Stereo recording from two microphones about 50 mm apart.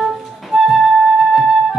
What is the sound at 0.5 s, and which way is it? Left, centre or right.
Flute, centre.